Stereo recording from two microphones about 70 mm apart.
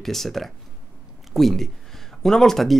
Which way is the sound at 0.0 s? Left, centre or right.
Centre.